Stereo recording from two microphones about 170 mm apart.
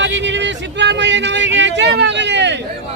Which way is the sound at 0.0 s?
90° right.